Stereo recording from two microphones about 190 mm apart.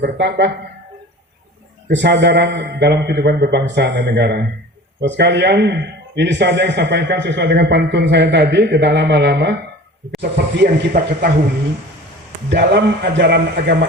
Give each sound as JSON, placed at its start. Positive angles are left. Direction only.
{"t": 0.0, "sound": "speech", "side_deg": -60}
{"t": 1.9, "sound": "speech", "side_deg": -65}
{"t": 12.5, "sound": "speech", "side_deg": -60}